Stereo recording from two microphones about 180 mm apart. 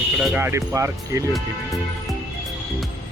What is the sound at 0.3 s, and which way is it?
Speech, 15° right (ahead or behind).